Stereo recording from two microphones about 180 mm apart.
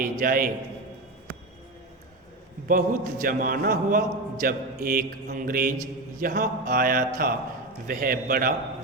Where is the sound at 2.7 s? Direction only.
50° right (ahead or behind).